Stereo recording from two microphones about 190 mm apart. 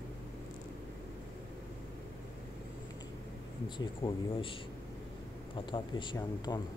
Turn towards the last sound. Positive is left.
turn(degrees=20)  # may be behind; listen again after turning